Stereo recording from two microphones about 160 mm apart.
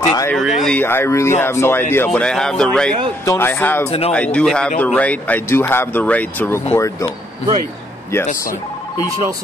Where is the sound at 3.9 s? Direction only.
40° left (ahead or behind).